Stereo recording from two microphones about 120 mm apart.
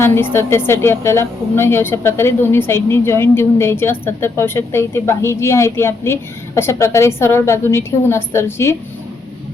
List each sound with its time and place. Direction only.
0.0 s a woman's voice: 20° left (ahead or behind)